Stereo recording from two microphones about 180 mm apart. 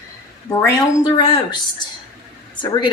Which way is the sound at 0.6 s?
20° left (ahead or behind).